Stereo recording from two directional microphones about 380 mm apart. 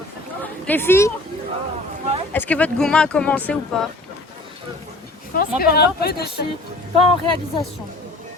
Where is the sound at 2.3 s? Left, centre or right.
Centre.